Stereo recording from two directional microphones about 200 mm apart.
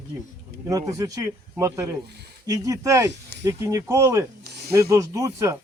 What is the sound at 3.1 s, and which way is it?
Speech, 60° right (ahead or behind).